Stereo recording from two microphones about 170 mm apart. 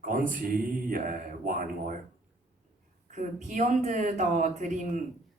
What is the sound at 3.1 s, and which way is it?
Speech, 50° right (ahead or behind).